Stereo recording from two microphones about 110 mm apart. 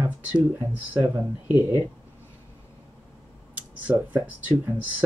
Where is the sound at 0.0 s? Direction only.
20° right (ahead or behind).